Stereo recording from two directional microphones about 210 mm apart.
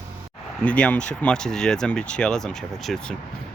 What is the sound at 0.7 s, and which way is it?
Speech, 5° left (ahead or behind).